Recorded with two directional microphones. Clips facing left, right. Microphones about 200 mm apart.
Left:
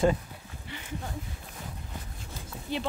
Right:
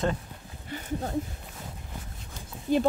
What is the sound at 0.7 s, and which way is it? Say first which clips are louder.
Speech: right 6 dB; 40° right (ahead or behind).